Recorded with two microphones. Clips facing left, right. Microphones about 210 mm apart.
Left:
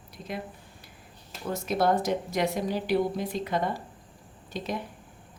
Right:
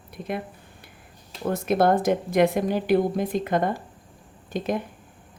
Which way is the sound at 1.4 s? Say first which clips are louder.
Right 5 dB; 55° right (ahead or behind).